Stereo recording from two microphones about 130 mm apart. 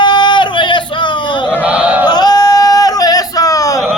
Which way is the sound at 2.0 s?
30° left (ahead or behind).